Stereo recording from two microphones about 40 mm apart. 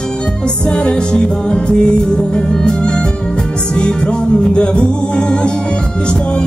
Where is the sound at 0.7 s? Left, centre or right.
Left.